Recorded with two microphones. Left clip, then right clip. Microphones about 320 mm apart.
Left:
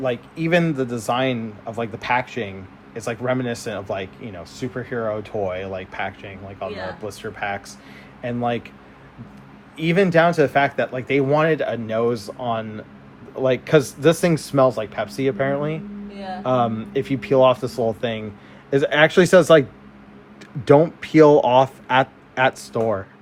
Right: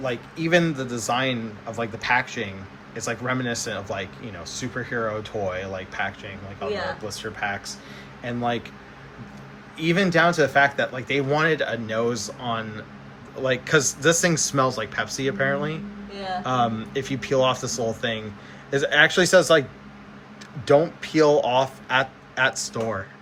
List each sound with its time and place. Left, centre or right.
0.0 s speech: left
9.7 s speech: left
16.1 s speech: right
16.4 s speech: centre
20.7 s speech: centre